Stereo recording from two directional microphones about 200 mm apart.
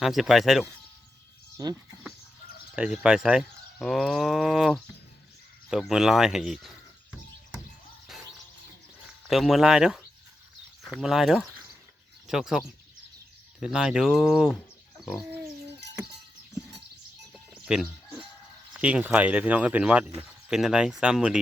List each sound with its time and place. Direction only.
0.0 s speech: centre (ahead or behind)
1.5 s speech: 20° right (ahead or behind)
2.7 s speech: 5° right (ahead or behind)
8.1 s music: centre (ahead or behind)
9.2 s speech: centre (ahead or behind)
15.0 s bird: centre (ahead or behind)
17.3 s a sound: 5° right (ahead or behind)
18.7 s speech: 5° right (ahead or behind)